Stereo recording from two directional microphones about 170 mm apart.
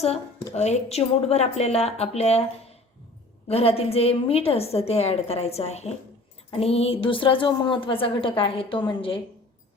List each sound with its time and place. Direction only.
0.5 s a woman's voice: 40° left (ahead or behind)